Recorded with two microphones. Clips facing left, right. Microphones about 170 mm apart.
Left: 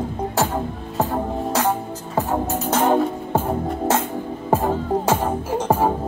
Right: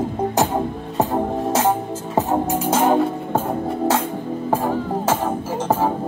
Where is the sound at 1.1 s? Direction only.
25° right (ahead or behind).